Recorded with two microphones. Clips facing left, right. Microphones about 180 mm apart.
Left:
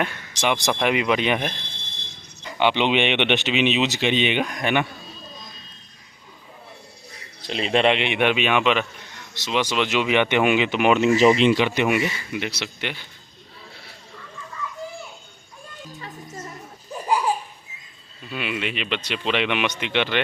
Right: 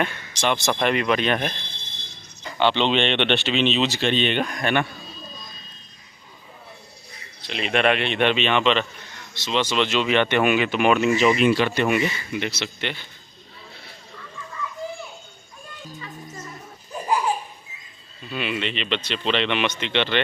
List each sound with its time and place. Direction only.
0.0 s speech: 15° left (ahead or behind)
2.6 s speech: 10° left (ahead or behind)
7.4 s speech: 35° left (ahead or behind); by 11.1 s 20° left (ahead or behind)
11.1 s speech: 35° left (ahead or behind); by 13.1 s 10° left (ahead or behind)
18.3 s speech: 5° left (ahead or behind)